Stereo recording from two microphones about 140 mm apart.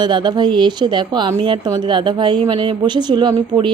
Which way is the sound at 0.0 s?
35° right (ahead or behind).